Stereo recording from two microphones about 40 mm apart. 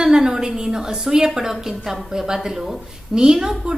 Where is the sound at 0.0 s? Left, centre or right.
Centre.